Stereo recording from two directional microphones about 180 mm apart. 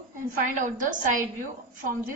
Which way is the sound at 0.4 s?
45° right (ahead or behind).